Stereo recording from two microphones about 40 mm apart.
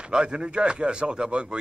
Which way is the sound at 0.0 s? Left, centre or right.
Right.